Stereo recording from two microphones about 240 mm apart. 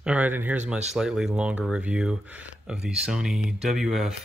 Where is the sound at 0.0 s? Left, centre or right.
Centre.